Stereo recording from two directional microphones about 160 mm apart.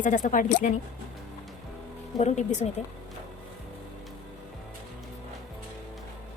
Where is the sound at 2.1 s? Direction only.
45° left (ahead or behind).